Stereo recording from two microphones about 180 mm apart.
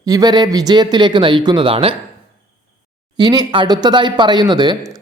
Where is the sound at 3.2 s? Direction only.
25° right (ahead or behind).